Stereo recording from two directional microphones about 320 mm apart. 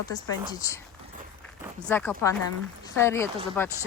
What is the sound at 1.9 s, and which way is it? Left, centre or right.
Speech, centre.